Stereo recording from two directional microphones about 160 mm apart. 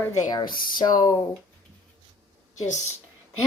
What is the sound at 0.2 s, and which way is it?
Speech, 25° left (ahead or behind).